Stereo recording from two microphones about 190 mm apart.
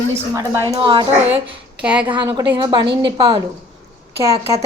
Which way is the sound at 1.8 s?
5° right (ahead or behind).